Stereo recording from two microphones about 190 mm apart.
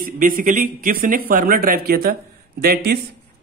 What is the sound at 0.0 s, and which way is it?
A man's voice, 45° right (ahead or behind).